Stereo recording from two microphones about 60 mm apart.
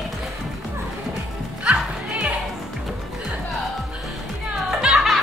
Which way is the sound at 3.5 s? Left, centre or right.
Centre.